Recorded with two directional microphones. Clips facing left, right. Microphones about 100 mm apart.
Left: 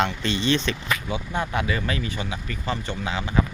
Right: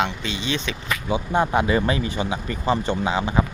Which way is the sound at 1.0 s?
25° right (ahead or behind).